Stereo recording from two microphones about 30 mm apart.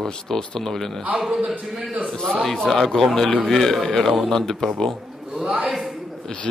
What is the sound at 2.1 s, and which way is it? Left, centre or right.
A man's voice, centre.